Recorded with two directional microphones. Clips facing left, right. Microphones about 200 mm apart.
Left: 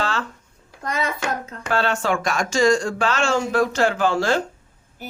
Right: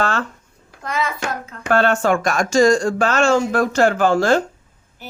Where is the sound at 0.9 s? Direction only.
40° left (ahead or behind).